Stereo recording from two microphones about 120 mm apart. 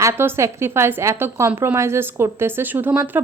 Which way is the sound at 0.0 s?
20° right (ahead or behind).